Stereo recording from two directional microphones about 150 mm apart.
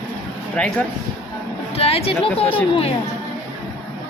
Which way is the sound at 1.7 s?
40° left (ahead or behind).